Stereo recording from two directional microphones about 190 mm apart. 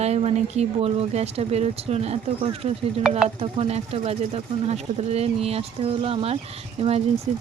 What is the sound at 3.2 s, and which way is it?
Speech, 35° right (ahead or behind).